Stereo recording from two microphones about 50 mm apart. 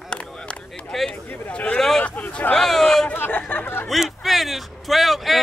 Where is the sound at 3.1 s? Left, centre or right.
Left.